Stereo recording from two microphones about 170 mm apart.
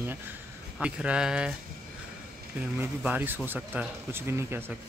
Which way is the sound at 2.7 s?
10° right (ahead or behind).